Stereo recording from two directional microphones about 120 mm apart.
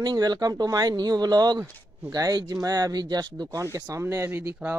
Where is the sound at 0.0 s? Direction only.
35° right (ahead or behind).